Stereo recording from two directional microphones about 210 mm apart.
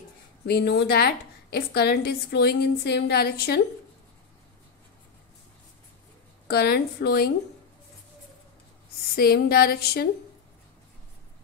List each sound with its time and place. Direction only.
0.5 s a woman's voice: 50° left (ahead or behind)
6.4 s a woman's voice: 50° left (ahead or behind)
9.1 s a woman's voice: 45° left (ahead or behind)